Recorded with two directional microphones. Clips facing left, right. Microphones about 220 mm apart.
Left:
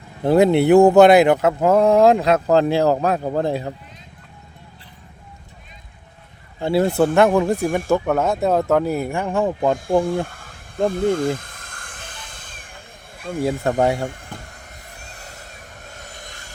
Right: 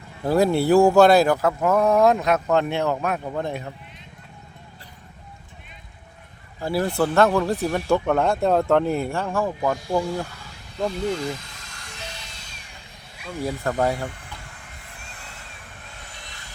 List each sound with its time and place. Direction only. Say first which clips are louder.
0.2 s speech: left 5 dB; 25° left (ahead or behind)
6.6 s speech: left 5 dB; 25° left (ahead or behind)
9.7 s a sound: left 5 dB; 50° left (ahead or behind)
13.7 s speech: left 3 dB; 25° left (ahead or behind)
14.1 s vehicle: left 5 dB; 45° left (ahead or behind)